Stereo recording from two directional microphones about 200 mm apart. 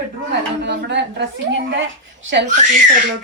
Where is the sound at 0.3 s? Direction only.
60° right (ahead or behind).